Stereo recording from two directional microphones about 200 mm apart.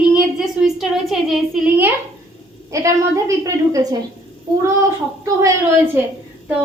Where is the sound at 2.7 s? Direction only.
15° right (ahead or behind).